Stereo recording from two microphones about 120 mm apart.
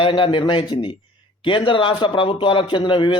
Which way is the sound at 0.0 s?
45° left (ahead or behind).